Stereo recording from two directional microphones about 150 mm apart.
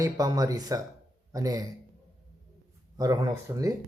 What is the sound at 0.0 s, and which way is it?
Speech, 25° right (ahead or behind).